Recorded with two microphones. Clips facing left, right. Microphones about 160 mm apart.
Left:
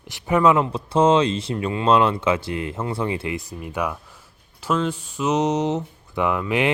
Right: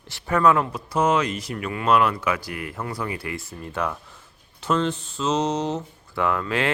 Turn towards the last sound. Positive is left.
turn(degrees=15)  # may be behind; listen again after turning